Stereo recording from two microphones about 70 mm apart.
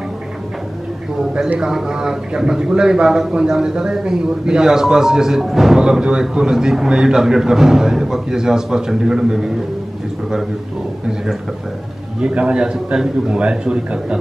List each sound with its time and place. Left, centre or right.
1.6 s a man's voice: centre
12.2 s a man's voice: centre